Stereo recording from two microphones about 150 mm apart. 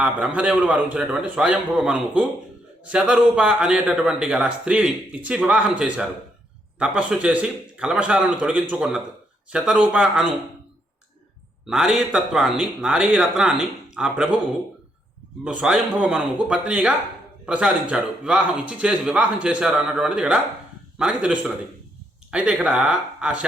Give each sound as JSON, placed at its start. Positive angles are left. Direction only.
{"t": 0.0, "sound": "a man's voice", "side_deg": -5}
{"t": 11.6, "sound": "a man's voice", "side_deg": -5}
{"t": 15.4, "sound": "a man's voice", "side_deg": -5}